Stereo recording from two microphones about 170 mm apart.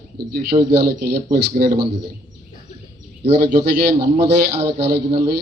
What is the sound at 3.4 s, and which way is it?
Speech, 60° right (ahead or behind).